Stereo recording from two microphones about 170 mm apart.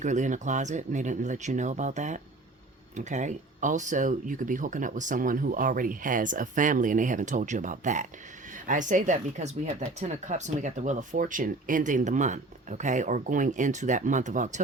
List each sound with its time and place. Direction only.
0.0 s speech: 45° right (ahead or behind)